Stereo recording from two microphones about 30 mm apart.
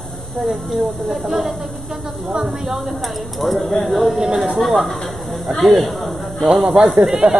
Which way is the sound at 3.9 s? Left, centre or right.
Centre.